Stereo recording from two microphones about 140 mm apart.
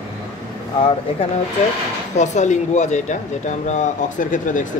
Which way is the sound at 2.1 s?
55° left (ahead or behind).